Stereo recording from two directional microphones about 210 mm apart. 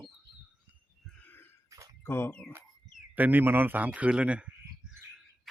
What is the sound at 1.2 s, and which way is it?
Throat clearing, 10° left (ahead or behind).